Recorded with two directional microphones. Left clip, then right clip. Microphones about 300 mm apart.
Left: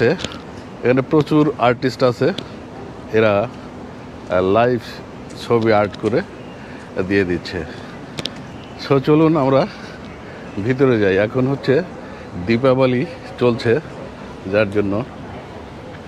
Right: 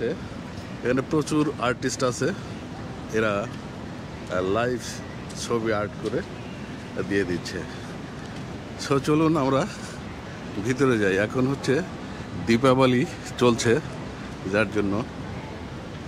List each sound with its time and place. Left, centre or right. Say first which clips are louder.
0.8 s speech: left 9 dB; centre
7.1 s speech: left 7 dB; centre
8.8 s speech: left 8 dB; centre
10.7 s speech: left 7 dB; centre
12.4 s speech: left 5 dB; right
14.5 s speech: left 7 dB; centre